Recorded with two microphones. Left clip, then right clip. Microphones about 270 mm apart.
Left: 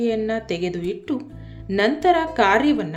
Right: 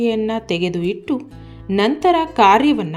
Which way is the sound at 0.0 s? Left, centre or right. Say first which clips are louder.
Right 3 dB; centre.